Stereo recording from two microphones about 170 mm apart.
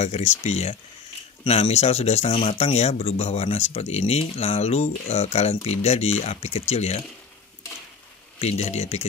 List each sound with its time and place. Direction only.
0.0 s speech: 40° left (ahead or behind)
8.4 s speech: 40° left (ahead or behind)